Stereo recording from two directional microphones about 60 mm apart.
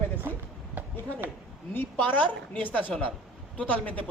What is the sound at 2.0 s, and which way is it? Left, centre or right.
A woman's voice, left.